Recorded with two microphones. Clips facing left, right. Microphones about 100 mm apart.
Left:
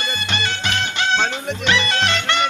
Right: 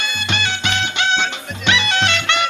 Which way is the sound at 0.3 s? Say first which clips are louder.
Right 1 dB; 40° left (ahead or behind).